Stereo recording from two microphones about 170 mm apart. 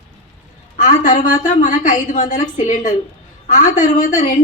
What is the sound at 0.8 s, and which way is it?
A woman's voice, 50° left (ahead or behind).